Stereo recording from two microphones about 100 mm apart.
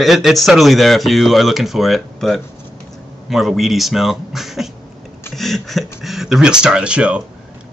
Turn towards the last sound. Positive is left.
turn(degrees=-10)  # may be behind; listen again after turning